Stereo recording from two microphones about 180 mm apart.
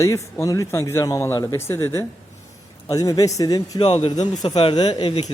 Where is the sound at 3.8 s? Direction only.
30° left (ahead or behind).